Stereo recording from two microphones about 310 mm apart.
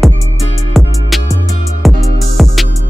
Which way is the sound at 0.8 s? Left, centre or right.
Centre.